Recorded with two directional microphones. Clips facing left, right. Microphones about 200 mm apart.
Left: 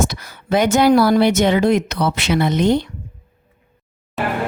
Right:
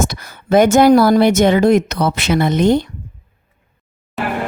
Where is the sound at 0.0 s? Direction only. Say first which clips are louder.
Right 1 dB; 50° right (ahead or behind).